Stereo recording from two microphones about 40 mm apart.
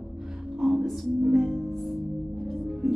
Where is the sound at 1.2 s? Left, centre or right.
Centre.